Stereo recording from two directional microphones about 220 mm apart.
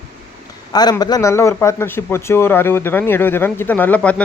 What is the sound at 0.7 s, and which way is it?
A man's voice, 20° left (ahead or behind).